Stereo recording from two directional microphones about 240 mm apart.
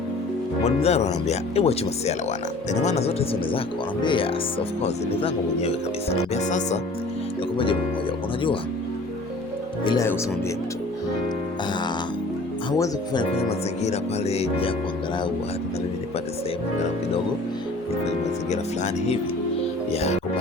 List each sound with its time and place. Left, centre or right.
0.6 s speech: left
9.8 s speech: centre
12.7 s speech: centre
13.8 s speech: left
19.9 s music: left